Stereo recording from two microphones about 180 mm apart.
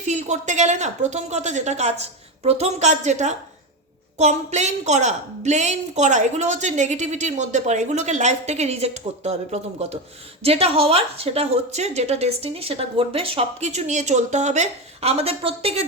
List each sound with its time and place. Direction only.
0.0 s a woman's voice: 40° right (ahead or behind)